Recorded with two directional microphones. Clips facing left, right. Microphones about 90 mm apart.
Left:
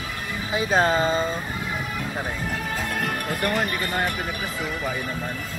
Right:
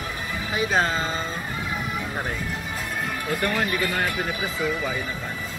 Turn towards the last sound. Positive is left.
turn(degrees=45)  # may be behind; listen again after turning